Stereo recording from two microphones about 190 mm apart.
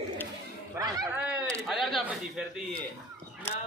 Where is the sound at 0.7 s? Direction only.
20° right (ahead or behind).